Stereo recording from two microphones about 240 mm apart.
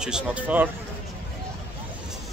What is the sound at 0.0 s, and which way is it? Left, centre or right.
Speech, centre.